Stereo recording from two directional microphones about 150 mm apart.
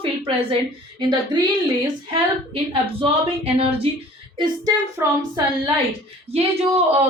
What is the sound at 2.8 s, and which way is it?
Speech, 40° right (ahead or behind).